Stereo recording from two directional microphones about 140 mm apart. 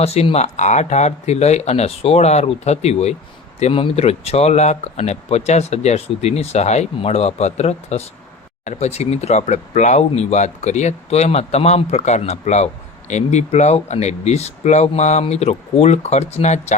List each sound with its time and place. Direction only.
0.0 s speech: 50° left (ahead or behind)